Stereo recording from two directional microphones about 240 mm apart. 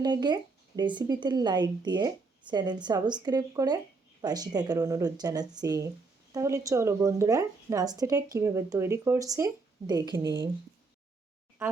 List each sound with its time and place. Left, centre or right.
0.0 s a woman's voice: centre